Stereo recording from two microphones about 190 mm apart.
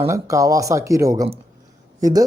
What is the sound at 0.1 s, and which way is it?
Speech, 15° right (ahead or behind).